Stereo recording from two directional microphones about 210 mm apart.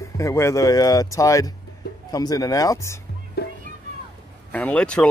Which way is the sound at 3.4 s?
50° left (ahead or behind).